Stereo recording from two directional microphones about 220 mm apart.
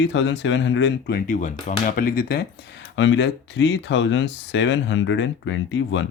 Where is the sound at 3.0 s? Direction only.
55° left (ahead or behind).